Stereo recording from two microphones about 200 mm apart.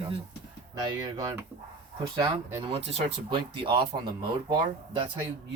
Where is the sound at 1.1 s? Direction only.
15° right (ahead or behind).